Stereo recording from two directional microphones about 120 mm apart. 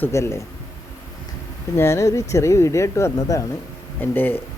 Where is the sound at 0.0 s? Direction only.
25° left (ahead or behind).